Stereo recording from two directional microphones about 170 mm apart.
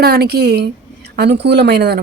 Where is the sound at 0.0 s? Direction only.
65° right (ahead or behind).